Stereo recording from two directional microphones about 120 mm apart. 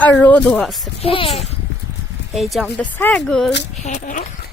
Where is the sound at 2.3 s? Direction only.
Centre (ahead or behind).